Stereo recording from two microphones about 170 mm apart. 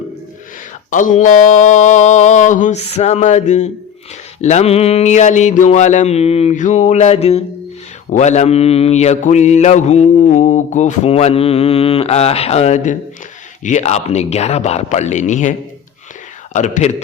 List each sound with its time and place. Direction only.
0.9 s mantra: 50° left (ahead or behind)
16.5 s a man's voice: 45° left (ahead or behind)